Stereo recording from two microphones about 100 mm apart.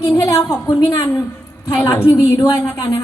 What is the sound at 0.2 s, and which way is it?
A man's voice, 30° left (ahead or behind).